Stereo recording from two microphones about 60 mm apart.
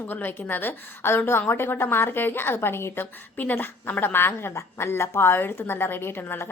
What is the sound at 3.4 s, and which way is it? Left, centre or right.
A woman's voice, left.